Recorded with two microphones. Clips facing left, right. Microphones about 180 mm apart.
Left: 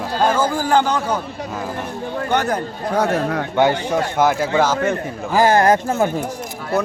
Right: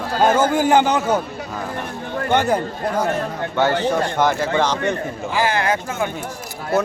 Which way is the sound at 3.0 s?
75° left (ahead or behind).